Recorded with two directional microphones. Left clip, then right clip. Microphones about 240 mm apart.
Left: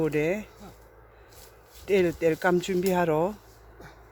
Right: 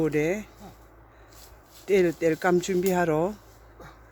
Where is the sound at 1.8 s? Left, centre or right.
Centre.